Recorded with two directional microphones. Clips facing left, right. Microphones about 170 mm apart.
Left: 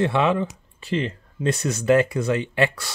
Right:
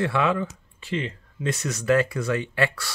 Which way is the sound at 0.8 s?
35° left (ahead or behind).